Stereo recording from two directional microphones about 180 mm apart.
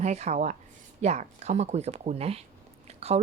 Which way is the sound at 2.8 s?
35° right (ahead or behind).